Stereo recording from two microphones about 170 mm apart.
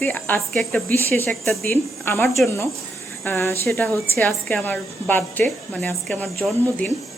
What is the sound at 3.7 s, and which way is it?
A woman's voice, centre (ahead or behind).